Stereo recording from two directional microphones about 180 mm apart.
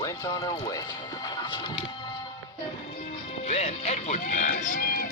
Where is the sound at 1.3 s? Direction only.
25° left (ahead or behind).